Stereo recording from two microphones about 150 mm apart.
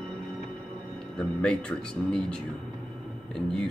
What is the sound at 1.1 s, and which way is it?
Speech, 5° left (ahead or behind).